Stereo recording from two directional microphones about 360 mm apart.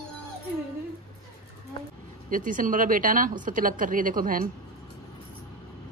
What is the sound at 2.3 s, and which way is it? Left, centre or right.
A woman's voice, right.